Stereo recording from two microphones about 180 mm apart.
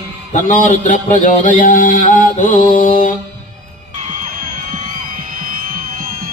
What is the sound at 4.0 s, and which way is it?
Music, 40° right (ahead or behind).